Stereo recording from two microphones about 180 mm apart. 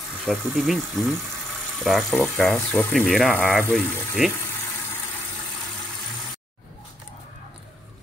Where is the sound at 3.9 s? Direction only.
10° right (ahead or behind).